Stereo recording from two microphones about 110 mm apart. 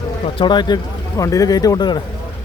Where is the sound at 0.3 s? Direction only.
45° left (ahead or behind).